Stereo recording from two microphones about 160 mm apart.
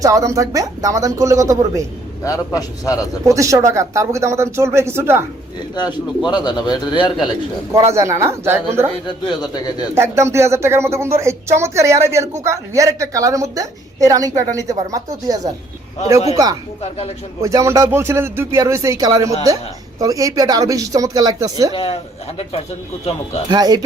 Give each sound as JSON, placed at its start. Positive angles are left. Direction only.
{"t": 0.0, "sound": "a woman's voice", "side_deg": -20}
{"t": 2.2, "sound": "a man's voice", "side_deg": 20}
{"t": 3.2, "sound": "speech", "side_deg": -20}
{"t": 5.7, "sound": "a man's voice", "side_deg": 25}
{"t": 7.9, "sound": "speech", "side_deg": -20}
{"t": 9.0, "sound": "a man's voice", "side_deg": 30}
{"t": 9.9, "sound": "a woman's voice", "side_deg": -15}
{"t": 23.5, "sound": "a woman's voice", "side_deg": -25}